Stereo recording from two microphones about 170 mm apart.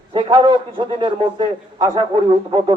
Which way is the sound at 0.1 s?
30° right (ahead or behind).